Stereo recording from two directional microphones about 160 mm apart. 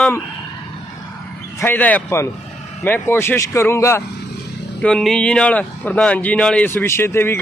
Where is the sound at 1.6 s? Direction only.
10° left (ahead or behind).